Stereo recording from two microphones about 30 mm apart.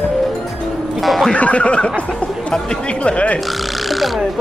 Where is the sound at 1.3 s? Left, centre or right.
Left.